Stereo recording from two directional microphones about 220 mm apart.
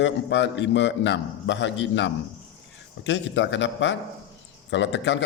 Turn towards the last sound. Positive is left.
turn(degrees=55)  # may be behind; listen again after turning